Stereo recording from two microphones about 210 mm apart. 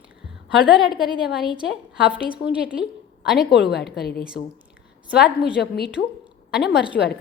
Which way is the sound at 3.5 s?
50° left (ahead or behind).